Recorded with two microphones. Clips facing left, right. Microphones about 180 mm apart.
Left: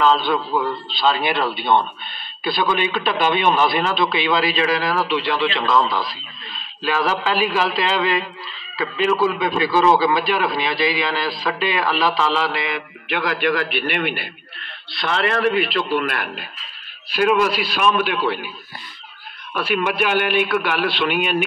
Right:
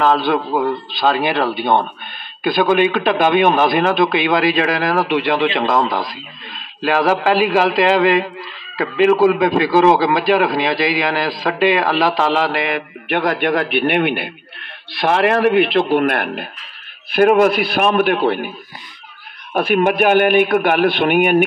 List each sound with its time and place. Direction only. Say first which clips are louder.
0.0 s a man's voice: right 2 dB; 50° right (ahead or behind)
19.5 s a man's voice: right 7 dB; 50° right (ahead or behind)